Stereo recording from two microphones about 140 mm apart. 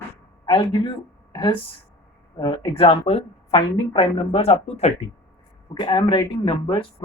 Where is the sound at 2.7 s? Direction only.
40° left (ahead or behind).